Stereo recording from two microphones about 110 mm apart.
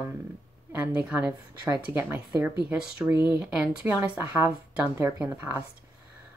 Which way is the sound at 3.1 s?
20° right (ahead or behind).